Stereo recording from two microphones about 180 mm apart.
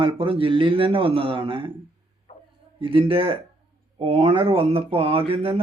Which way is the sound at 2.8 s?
30° right (ahead or behind).